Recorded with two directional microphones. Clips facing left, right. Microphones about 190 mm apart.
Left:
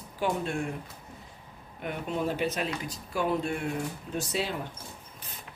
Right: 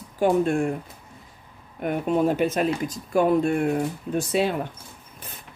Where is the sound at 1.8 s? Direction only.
50° right (ahead or behind).